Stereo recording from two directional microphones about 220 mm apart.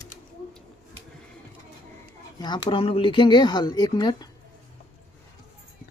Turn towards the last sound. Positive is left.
turn(degrees=20)  # may be behind; listen again after turning